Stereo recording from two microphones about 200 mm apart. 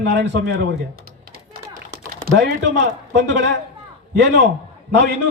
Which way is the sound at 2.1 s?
55° right (ahead or behind).